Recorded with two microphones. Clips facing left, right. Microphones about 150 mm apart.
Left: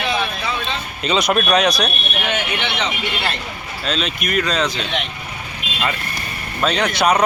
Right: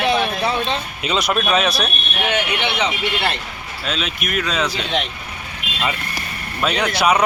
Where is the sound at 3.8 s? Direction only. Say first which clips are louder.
Left 2 dB; 5° right (ahead or behind).